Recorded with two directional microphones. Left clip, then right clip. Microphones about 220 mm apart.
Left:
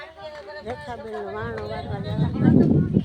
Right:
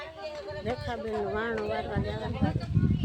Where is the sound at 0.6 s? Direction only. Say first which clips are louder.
Even; 5° left (ahead or behind).